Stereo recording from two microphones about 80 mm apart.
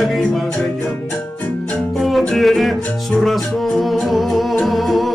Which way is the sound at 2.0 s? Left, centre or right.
Centre.